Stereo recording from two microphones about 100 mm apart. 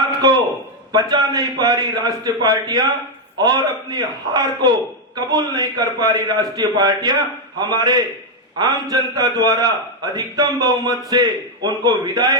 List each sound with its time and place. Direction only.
0.9 s a man's voice: 40° right (ahead or behind)